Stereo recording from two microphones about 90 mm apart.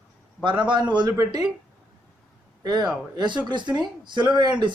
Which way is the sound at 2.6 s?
50° right (ahead or behind).